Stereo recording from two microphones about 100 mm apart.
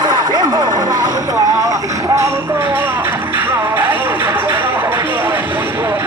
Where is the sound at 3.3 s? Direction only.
20° right (ahead or behind).